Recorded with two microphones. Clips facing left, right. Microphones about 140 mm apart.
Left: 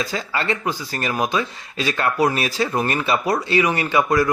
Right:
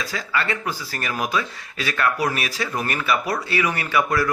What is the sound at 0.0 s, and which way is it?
Speech, 25° left (ahead or behind).